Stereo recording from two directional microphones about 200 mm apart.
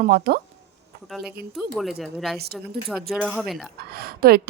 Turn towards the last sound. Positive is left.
turn(degrees=-50)  # may be behind; listen again after turning